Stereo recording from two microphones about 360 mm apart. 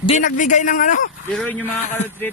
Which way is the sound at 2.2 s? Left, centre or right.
Centre.